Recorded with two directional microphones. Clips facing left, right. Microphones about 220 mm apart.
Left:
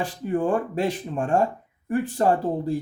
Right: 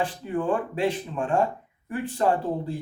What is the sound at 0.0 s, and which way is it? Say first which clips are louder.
Speech: left 2 dB; 40° left (ahead or behind).